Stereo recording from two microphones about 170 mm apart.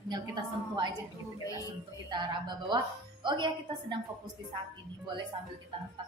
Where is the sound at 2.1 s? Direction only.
25° right (ahead or behind).